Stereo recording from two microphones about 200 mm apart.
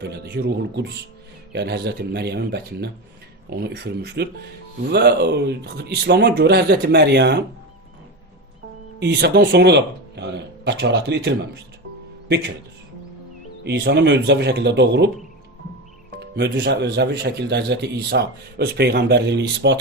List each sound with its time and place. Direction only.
0.0 s speech: 55° right (ahead or behind)
9.0 s speech: 55° right (ahead or behind)
13.7 s speech: 55° right (ahead or behind)
16.2 s speech: 55° right (ahead or behind)